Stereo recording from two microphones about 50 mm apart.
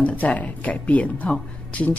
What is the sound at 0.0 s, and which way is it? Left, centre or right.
Speech, left.